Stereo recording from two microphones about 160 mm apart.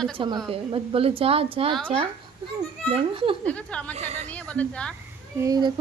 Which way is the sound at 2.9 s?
35° right (ahead or behind).